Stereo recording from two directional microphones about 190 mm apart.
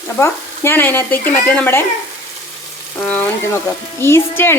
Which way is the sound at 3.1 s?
10° left (ahead or behind).